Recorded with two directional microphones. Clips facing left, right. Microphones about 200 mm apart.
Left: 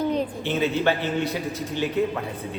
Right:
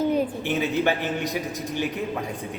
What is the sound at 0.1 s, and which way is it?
A woman's voice, 10° right (ahead or behind).